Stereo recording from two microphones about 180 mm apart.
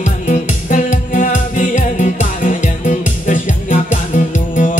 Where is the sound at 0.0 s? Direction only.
45° left (ahead or behind).